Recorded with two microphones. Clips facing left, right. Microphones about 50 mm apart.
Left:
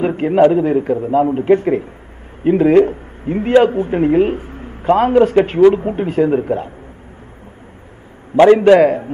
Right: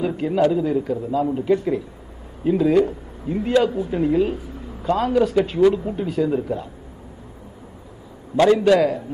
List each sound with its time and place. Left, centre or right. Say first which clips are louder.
0.0 s a man's voice: left 7 dB; left
8.4 s a man's voice: left 7 dB; left